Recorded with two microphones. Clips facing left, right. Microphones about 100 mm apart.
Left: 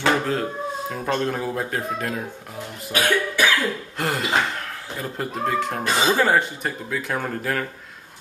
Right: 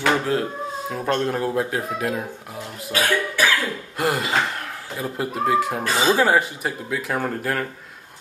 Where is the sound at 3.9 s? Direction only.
5° right (ahead or behind).